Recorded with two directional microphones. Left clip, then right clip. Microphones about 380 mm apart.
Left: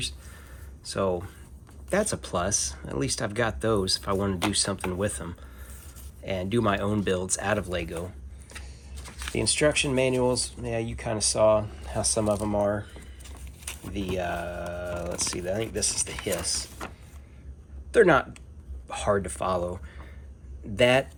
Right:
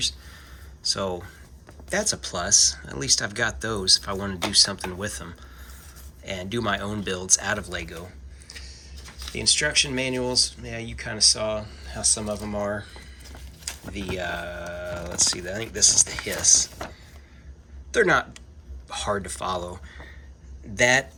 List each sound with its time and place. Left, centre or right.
0.0 s a sound: centre
0.9 s speech: centre
8.7 s a sound: left
9.3 s speech: centre
14.1 s speech: centre
17.9 s speech: centre